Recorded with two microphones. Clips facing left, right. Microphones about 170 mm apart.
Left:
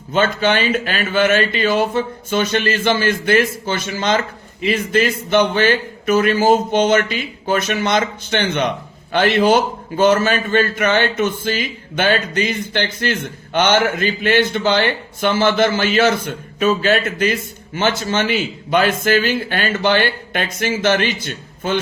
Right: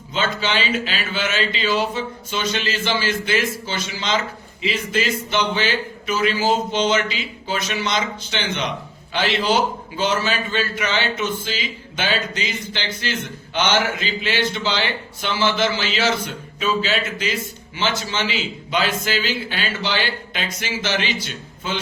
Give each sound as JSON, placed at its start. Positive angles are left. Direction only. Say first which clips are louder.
{"t": 0.1, "sound": "a man's voice", "louder": "left 7 dB", "side_deg": 55}